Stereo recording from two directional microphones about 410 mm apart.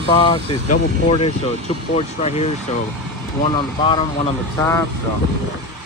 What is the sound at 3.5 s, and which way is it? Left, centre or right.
Speech, centre.